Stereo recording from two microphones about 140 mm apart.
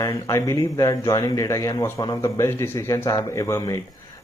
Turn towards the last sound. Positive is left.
turn(degrees=25)  # may be behind; listen again after turning